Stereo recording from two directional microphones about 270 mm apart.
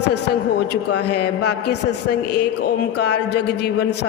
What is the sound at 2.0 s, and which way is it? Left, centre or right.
Speech, left.